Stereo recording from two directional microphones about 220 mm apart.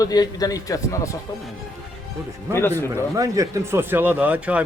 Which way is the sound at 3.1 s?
15° right (ahead or behind).